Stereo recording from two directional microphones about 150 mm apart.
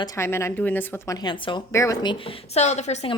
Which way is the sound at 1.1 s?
30° left (ahead or behind).